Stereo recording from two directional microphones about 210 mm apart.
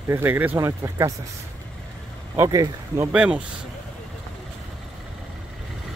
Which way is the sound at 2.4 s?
15° right (ahead or behind).